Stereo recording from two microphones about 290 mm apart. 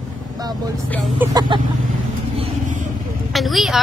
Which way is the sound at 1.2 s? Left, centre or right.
Centre.